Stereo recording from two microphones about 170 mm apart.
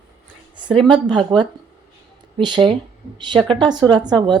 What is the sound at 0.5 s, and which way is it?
A woman's voice, 25° right (ahead or behind).